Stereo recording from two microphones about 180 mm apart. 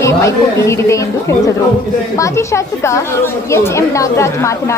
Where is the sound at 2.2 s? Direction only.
15° left (ahead or behind).